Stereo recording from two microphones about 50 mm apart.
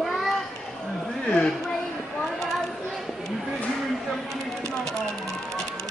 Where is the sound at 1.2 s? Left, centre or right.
Centre.